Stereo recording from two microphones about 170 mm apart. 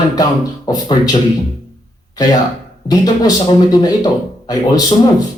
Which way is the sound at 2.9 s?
20° left (ahead or behind).